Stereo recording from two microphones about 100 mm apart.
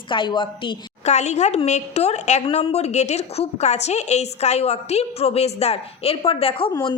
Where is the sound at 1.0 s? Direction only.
90° left.